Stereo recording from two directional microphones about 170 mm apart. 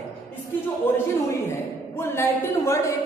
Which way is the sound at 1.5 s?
15° left (ahead or behind).